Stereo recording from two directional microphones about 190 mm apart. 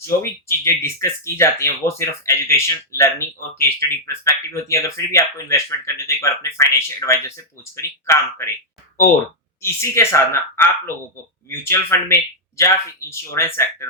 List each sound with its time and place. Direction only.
0.4 s speech: 15° left (ahead or behind)
9.6 s speech: 15° left (ahead or behind)